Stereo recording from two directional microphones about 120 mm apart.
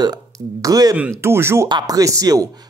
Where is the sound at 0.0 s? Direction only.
30° right (ahead or behind).